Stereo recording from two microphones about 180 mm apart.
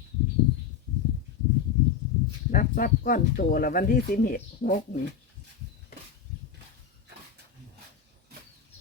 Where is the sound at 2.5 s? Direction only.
50° left (ahead or behind).